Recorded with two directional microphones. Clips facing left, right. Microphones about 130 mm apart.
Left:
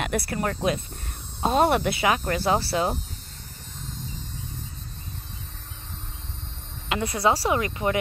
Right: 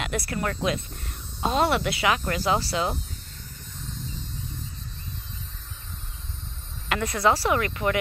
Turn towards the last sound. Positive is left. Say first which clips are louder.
# even
turn(degrees=25)  # may be behind; listen again after turning